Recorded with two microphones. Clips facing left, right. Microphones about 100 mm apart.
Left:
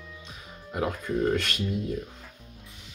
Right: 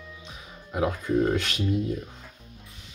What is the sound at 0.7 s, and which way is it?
Speech, 10° right (ahead or behind).